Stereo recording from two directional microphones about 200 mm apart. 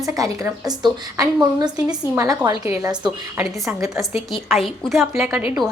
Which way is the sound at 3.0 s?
5° right (ahead or behind).